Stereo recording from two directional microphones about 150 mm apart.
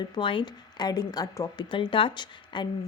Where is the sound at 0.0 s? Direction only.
30° left (ahead or behind).